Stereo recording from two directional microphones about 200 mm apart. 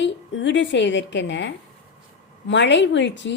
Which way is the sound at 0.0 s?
65° left (ahead or behind).